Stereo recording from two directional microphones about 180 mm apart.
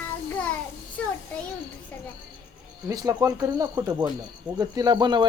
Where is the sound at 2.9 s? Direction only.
20° right (ahead or behind).